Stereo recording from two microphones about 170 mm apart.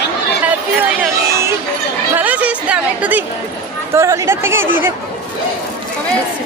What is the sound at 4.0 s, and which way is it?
Speech, 15° right (ahead or behind).